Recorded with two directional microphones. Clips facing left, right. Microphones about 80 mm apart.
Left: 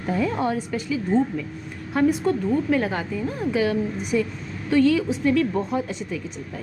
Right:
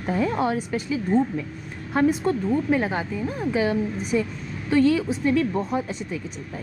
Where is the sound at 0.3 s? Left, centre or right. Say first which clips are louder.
Right 1 dB; centre.